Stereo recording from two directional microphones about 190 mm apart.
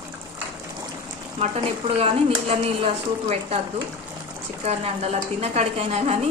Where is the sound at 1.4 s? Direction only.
30° right (ahead or behind).